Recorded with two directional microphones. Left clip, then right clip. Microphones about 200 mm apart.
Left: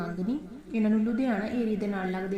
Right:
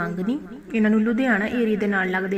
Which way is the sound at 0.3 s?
10° right (ahead or behind).